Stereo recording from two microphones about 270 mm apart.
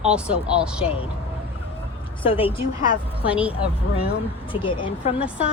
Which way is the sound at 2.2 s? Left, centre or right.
Centre.